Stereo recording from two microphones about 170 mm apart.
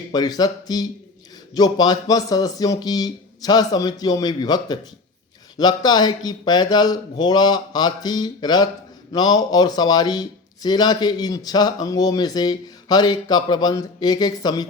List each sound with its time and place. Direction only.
0.1 s speech: 25° left (ahead or behind)